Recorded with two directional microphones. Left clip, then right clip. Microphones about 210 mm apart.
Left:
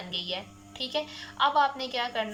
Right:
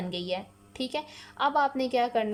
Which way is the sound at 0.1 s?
55° right (ahead or behind).